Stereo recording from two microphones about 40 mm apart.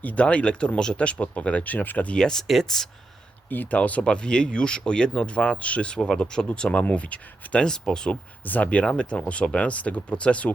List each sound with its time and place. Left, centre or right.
0.0 s speech: left
2.1 s speech: centre
2.5 s speech: centre
3.5 s speech: left
3.8 s speech: left
4.0 s speech: left
7.6 s speech: centre
8.4 s speech: left
8.8 s speech: left